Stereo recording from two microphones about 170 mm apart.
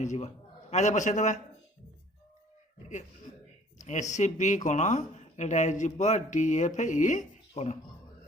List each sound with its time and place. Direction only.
0.0 s speech: 45° left (ahead or behind)
4.1 s speech: 45° left (ahead or behind)